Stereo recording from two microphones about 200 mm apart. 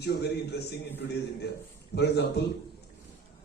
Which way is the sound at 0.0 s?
55° left (ahead or behind).